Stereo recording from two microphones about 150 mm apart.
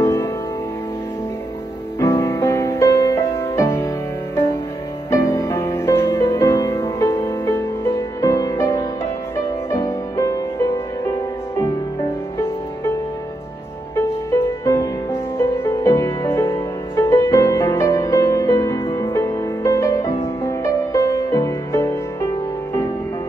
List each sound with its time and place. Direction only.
0.0 s music: 20° left (ahead or behind)
2.0 s music: 20° left (ahead or behind)
5.1 s music: 20° left (ahead or behind)
13.9 s music: 20° left (ahead or behind)